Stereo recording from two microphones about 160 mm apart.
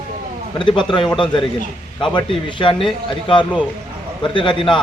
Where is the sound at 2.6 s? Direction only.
35° left (ahead or behind).